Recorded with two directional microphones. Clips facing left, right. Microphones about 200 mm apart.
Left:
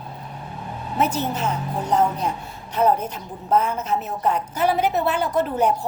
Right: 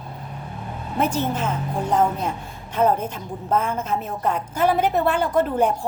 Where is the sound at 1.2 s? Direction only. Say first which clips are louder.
Even; 50° right (ahead or behind).